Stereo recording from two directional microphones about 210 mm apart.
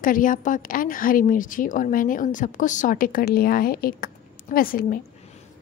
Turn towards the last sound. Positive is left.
turn(degrees=45)  # may be behind; listen again after turning